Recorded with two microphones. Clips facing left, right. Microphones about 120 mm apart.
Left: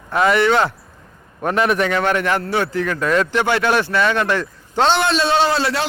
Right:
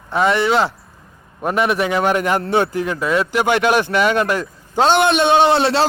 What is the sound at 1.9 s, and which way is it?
A man's voice, 15° right (ahead or behind).